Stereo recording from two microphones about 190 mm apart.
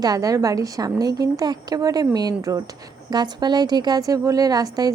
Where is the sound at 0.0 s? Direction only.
20° right (ahead or behind).